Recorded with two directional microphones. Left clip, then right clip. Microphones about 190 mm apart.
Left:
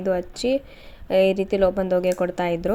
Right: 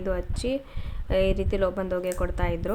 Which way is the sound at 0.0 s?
15° left (ahead or behind).